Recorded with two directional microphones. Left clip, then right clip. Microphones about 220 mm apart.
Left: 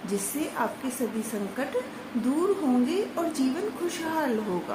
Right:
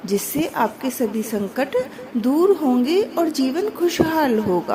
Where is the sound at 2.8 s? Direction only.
40° right (ahead or behind).